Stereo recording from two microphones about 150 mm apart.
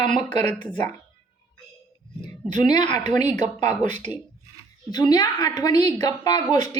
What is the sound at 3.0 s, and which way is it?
Speech, 50° right (ahead or behind).